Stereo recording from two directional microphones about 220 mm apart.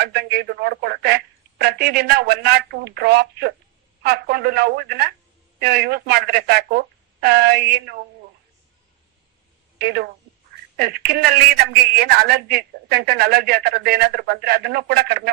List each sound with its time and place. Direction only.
0.0 s a woman's voice: 45° right (ahead or behind)
9.8 s a woman's voice: 45° right (ahead or behind)